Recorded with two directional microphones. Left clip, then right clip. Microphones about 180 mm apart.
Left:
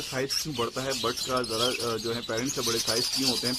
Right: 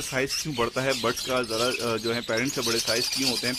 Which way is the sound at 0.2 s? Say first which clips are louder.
Right 3 dB; 25° right (ahead or behind).